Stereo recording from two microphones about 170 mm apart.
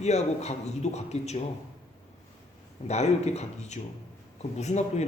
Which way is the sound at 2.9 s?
40° left (ahead or behind).